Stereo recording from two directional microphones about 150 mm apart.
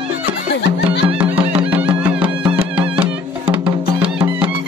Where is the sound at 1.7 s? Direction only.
10° right (ahead or behind).